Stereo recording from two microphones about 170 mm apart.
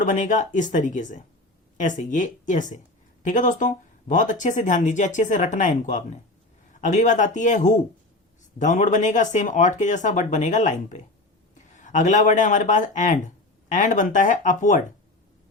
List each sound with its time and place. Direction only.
0.0 s speech: 50° left (ahead or behind)